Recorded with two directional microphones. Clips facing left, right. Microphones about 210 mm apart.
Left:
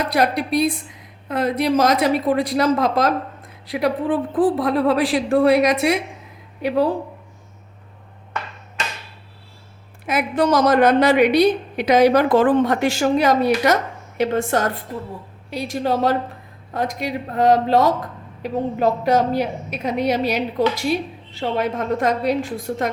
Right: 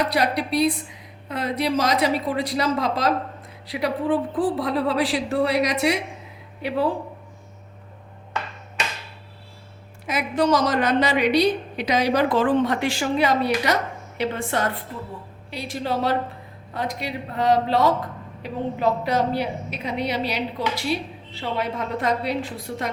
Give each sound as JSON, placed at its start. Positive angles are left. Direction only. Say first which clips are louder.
{"t": 0.0, "sound": "a woman's voice", "louder": "left 3 dB", "side_deg": 50}
{"t": 10.1, "sound": "a woman's voice", "louder": "left 2 dB", "side_deg": 55}